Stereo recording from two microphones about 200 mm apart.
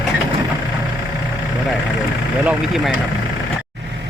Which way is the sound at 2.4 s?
5° right (ahead or behind).